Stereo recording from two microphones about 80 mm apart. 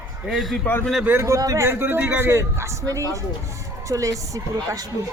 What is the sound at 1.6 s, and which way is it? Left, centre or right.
Speech, right.